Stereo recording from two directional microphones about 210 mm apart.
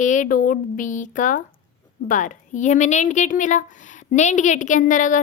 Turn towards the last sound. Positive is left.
turn(degrees=40)  # may be behind; listen again after turning